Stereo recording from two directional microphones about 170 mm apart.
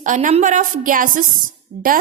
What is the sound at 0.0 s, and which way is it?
A woman's voice, 45° right (ahead or behind).